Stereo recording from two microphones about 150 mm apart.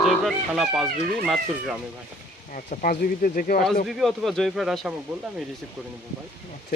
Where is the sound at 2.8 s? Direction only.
70° left (ahead or behind).